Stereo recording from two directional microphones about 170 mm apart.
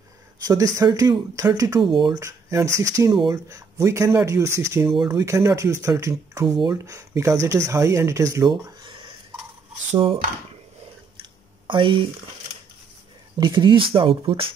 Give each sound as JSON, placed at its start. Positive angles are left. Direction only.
{"t": 0.4, "sound": "speech", "side_deg": -20}
{"t": 4.8, "sound": "speech", "side_deg": 0}
{"t": 5.1, "sound": "speech", "side_deg": -15}
{"t": 9.8, "sound": "speech", "side_deg": -35}
{"t": 11.1, "sound": "a sound", "side_deg": -30}
{"t": 13.4, "sound": "speech", "side_deg": -25}